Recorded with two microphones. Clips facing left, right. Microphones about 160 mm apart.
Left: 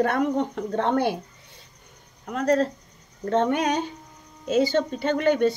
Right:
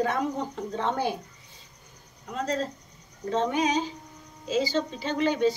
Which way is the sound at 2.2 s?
65° left (ahead or behind).